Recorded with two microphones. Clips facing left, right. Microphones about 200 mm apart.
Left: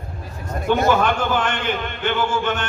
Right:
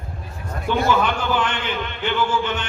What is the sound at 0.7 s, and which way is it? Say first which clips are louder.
A man's voice: left 2 dB; 50° left (ahead or behind).